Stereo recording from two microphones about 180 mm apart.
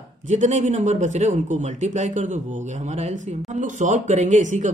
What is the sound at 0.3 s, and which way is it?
Speech, 40° right (ahead or behind).